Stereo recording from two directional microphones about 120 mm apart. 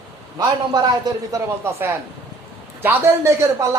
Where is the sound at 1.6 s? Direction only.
20° right (ahead or behind).